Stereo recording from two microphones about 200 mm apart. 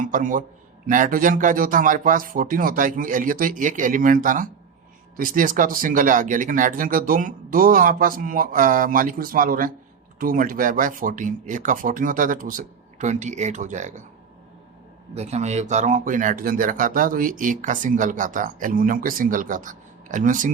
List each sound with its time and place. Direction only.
0.0 s a man's voice: 40° right (ahead or behind)
15.1 s speech: 35° right (ahead or behind)